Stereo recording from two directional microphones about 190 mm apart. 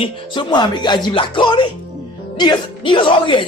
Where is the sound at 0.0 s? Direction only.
25° left (ahead or behind).